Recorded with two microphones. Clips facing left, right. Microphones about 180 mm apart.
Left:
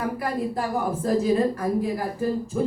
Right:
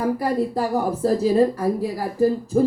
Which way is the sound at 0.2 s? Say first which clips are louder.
Right 5 dB; 35° right (ahead or behind).